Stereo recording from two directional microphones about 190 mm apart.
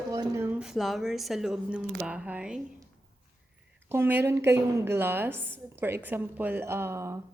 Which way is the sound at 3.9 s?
10° right (ahead or behind).